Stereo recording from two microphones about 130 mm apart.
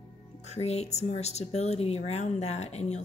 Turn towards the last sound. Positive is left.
turn(degrees=60)  # may be behind; listen again after turning